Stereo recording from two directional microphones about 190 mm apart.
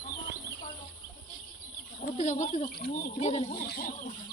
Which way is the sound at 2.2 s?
40° left (ahead or behind).